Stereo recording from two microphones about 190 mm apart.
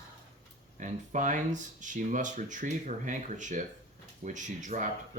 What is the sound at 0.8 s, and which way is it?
Speech, 40° right (ahead or behind).